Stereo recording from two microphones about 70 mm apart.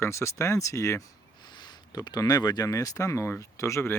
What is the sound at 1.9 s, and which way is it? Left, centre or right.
Speech, left.